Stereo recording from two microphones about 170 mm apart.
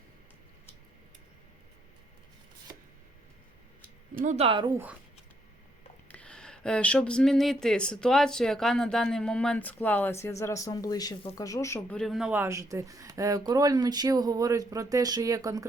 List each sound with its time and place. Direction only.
4.1 s speech: 50° right (ahead or behind); by 4.7 s 30° right (ahead or behind)
6.1 s speech: 5° left (ahead or behind)
11.9 s speech: centre (ahead or behind); by 15.6 s 20° right (ahead or behind)